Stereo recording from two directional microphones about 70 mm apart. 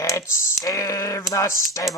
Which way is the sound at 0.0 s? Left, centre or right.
Left.